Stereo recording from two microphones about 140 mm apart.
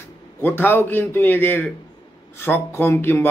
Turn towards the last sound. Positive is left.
turn(degrees=15)  # may be behind; listen again after turning